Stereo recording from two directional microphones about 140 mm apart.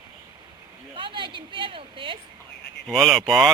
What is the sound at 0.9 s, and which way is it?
A woman's voice, 35° right (ahead or behind).